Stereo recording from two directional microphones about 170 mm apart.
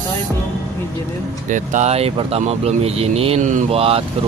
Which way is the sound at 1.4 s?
50° right (ahead or behind).